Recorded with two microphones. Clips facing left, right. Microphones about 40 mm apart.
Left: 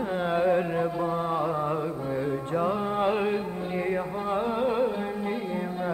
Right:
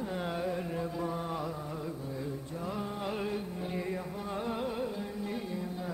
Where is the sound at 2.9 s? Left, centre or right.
Left.